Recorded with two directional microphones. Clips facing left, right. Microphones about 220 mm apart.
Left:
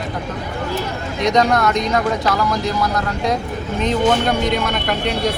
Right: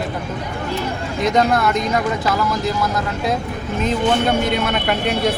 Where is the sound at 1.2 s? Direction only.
5° right (ahead or behind).